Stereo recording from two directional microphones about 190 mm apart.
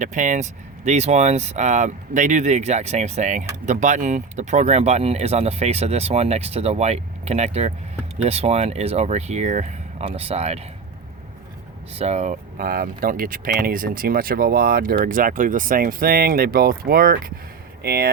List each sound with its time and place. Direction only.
0.0 s speech: 40° right (ahead or behind)
11.9 s speech: 35° right (ahead or behind); by 18.1 s 55° right (ahead or behind)